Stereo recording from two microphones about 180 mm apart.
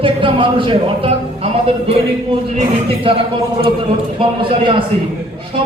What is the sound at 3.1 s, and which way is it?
A man's voice, 30° right (ahead or behind).